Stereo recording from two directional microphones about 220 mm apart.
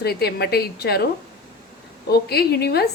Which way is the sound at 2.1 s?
45° left (ahead or behind).